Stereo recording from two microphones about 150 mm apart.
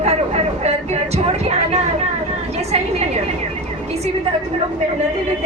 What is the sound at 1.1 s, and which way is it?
Vehicle, 45° right (ahead or behind).